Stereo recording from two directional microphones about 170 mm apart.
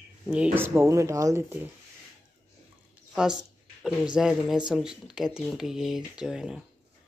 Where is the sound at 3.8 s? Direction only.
5° right (ahead or behind).